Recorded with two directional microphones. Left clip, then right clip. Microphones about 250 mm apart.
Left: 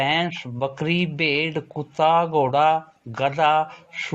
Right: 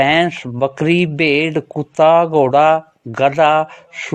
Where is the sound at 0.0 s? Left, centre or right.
Right.